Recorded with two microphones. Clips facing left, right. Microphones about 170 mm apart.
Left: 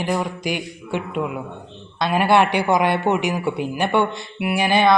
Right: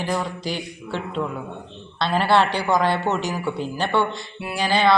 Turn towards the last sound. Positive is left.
turn(degrees=20)  # may be behind; listen again after turning